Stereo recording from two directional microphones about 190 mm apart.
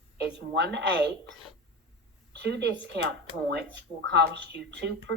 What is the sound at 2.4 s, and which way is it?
Speech, 65° right (ahead or behind).